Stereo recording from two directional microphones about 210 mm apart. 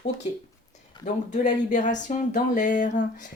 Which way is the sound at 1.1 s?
35° left (ahead or behind).